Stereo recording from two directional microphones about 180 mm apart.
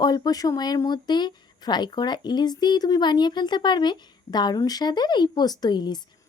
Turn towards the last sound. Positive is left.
turn(degrees=25)  # may be behind; listen again after turning